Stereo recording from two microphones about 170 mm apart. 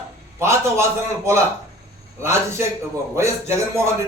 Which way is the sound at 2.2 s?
15° right (ahead or behind).